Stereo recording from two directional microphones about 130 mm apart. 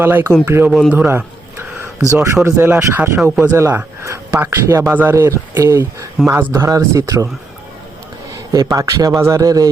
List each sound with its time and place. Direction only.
0.0 s speech: 15° right (ahead or behind)
0.7 s speech: centre (ahead or behind)
0.9 s bird: 15° right (ahead or behind)
2.2 s speech: 20° right (ahead or behind)
8.3 s speech: 25° right (ahead or behind)